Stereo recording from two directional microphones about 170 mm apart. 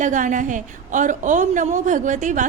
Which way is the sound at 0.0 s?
50° right (ahead or behind).